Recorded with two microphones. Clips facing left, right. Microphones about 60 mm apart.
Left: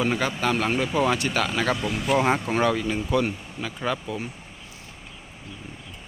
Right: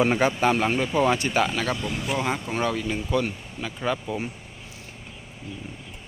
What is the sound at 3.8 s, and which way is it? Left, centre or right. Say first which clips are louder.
Speech: right 1 dB; centre.